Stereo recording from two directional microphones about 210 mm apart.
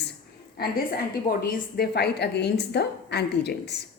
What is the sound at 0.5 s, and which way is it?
A woman's voice, 45° left (ahead or behind).